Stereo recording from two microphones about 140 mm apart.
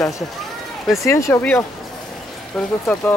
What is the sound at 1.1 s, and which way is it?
Speech, 20° left (ahead or behind).